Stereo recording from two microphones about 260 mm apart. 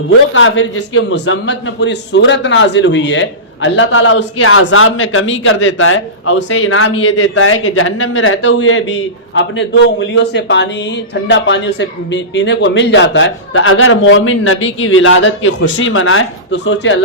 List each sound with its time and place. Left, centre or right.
0.3 s a man's voice: left